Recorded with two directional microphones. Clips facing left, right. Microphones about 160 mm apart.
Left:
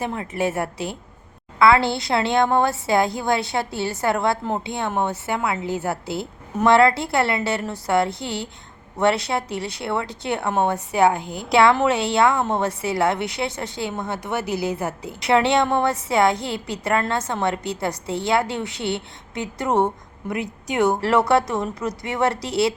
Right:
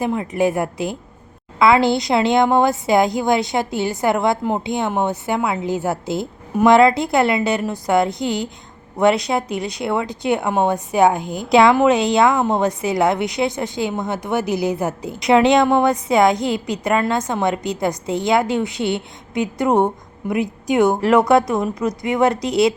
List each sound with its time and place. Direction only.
0.0 s a woman's voice: 15° right (ahead or behind)